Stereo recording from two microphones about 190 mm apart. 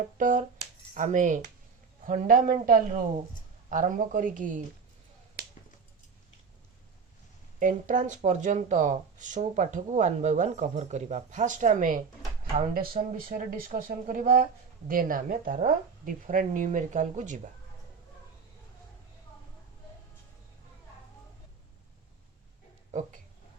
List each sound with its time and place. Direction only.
0.2 s speech: 45° right (ahead or behind)
7.6 s speech: 45° right (ahead or behind)
22.9 s a sound: 40° right (ahead or behind)